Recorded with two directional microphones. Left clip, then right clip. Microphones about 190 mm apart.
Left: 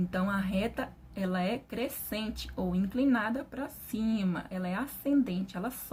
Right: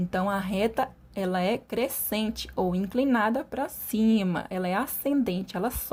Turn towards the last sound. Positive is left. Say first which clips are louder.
# right 8 dB
turn(degrees=-40)  # may be behind; listen again after turning